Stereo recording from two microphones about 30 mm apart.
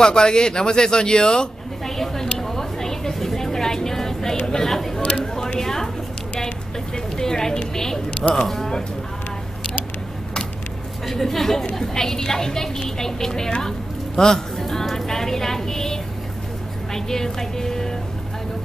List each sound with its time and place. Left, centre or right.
0.0 s a woman's voice: left
2.3 s a sound: centre
4.5 s speech: centre
5.2 s a sound: centre
7.2 s speech: centre
11.1 s a woman's voice: centre